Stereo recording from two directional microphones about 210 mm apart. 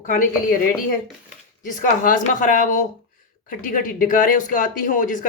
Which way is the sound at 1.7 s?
40° left (ahead or behind).